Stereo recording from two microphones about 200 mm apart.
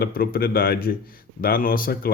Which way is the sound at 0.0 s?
50° left (ahead or behind).